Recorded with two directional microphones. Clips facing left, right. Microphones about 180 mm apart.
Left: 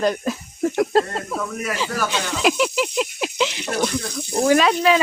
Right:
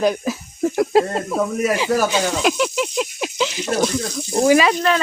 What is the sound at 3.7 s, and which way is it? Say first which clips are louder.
Speech: right 3 dB; 15° right (ahead or behind).